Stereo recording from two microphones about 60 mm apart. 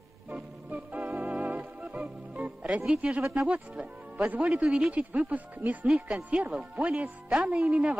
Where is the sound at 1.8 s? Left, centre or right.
Right.